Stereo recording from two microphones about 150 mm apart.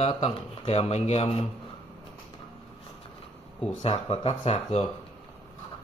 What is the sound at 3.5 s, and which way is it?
Speech, 5° left (ahead or behind).